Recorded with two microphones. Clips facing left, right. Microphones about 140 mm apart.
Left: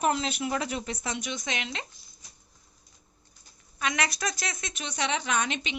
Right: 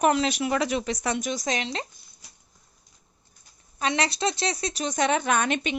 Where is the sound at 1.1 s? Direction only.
40° right (ahead or behind).